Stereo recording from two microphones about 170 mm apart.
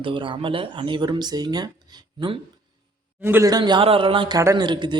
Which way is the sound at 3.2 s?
15° right (ahead or behind).